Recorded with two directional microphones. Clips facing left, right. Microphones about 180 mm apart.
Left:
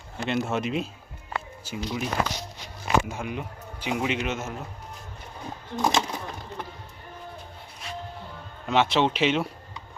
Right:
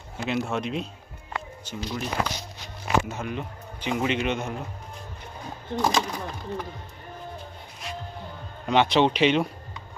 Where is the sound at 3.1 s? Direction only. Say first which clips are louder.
Right 1 dB; 10° left (ahead or behind).